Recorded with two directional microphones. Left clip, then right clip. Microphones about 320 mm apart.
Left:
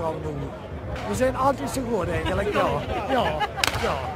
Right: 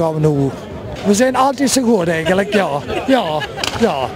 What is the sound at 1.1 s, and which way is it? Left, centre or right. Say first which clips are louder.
Speech: right 8 dB; right.